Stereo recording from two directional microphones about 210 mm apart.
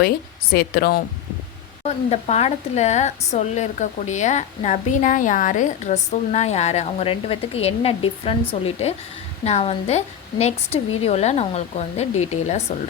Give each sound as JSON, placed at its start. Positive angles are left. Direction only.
{"t": 0.5, "sound": "speech", "side_deg": 50}
{"t": 2.0, "sound": "speech", "side_deg": 30}